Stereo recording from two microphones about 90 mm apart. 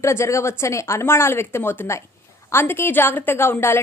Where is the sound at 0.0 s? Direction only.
30° left (ahead or behind).